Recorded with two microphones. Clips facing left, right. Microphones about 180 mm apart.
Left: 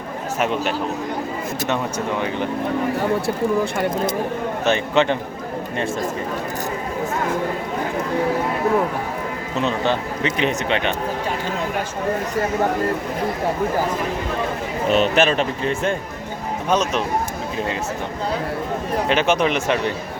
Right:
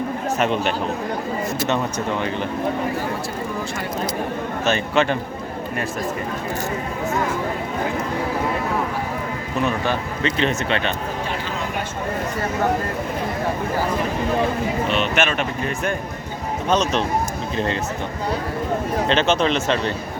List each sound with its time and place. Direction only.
0.3 s speech: 5° left (ahead or behind)
3.0 s speech: 60° left (ahead or behind)
4.6 s speech: 20° left (ahead or behind)
9.6 s speech: 20° left (ahead or behind)
14.8 s speech: 40° left (ahead or behind)
16.6 s speech: 10° left (ahead or behind)
19.0 s speech: 10° left (ahead or behind)